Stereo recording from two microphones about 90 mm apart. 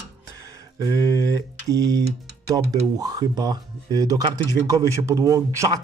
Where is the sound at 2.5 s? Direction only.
45° right (ahead or behind).